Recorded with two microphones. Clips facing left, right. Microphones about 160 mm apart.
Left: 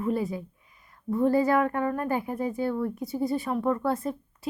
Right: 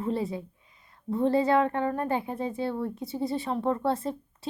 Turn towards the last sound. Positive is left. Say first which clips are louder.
# left 1 dB
turn(degrees=-30)  # may be behind; listen again after turning